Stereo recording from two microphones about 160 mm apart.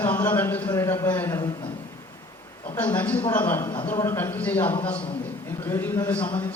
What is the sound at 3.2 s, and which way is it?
Speech, 30° left (ahead or behind).